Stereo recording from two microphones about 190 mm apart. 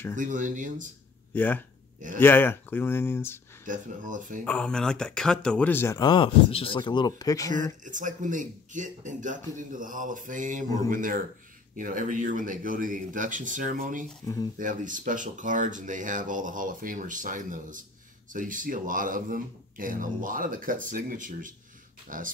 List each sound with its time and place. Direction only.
0.1 s speech: 45° right (ahead or behind)
1.3 s speech: 10° left (ahead or behind)
3.6 s speech: 45° right (ahead or behind)
4.5 s speech: 5° left (ahead or behind)
7.8 s speech: 40° right (ahead or behind)
14.2 s speech: 20° left (ahead or behind)
14.6 s speech: 45° right (ahead or behind)